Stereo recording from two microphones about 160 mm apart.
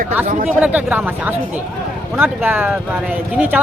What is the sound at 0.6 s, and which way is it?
Speech, 10° right (ahead or behind).